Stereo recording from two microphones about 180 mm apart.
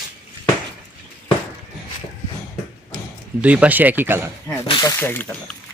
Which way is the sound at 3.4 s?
5° right (ahead or behind).